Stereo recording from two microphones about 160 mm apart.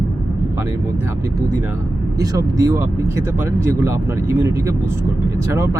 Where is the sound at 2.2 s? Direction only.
20° right (ahead or behind).